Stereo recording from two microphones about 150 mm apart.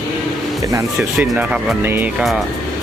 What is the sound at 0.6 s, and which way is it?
Speech, 20° right (ahead or behind).